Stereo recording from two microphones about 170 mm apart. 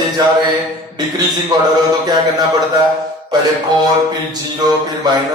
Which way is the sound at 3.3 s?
25° right (ahead or behind).